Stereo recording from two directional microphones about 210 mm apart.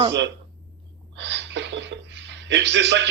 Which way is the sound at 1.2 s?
55° right (ahead or behind).